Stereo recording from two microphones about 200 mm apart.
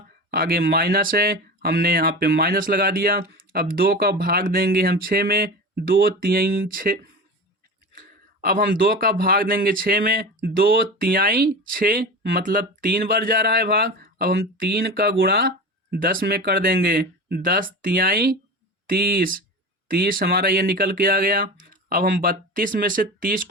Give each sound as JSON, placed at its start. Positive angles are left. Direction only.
{"t": 0.3, "sound": "speech", "side_deg": -50}